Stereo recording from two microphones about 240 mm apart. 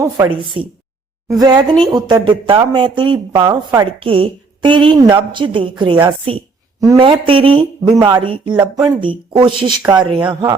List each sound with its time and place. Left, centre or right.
0.2 s speech: centre
1.4 s speech: centre